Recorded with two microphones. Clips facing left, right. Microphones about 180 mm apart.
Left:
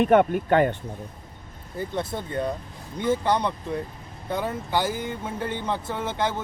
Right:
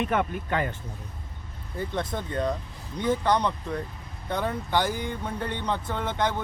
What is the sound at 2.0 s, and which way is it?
Speech, 10° left (ahead or behind).